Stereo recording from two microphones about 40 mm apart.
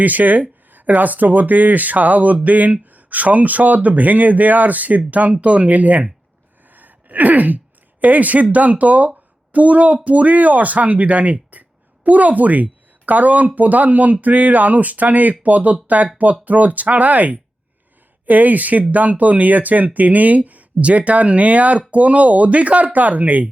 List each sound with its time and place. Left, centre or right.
0.0 s speech: right
6.7 s gasp: right
8.0 s a woman's voice: right